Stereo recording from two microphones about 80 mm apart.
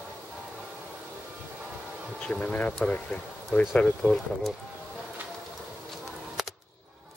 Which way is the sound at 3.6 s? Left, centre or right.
Centre.